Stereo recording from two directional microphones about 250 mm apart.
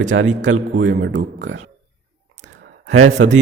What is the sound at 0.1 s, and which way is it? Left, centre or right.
Speech, right.